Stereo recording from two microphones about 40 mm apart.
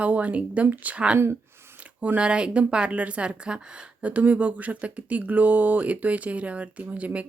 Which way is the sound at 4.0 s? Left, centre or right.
Right.